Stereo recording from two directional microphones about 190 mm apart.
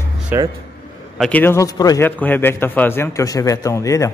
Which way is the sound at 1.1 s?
5° left (ahead or behind).